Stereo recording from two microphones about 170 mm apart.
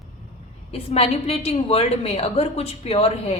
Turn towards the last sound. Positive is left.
turn(degrees=35)  # may be behind; listen again after turning